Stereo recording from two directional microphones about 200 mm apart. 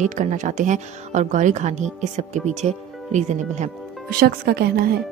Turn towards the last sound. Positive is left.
turn(degrees=-50)  # may be behind; listen again after turning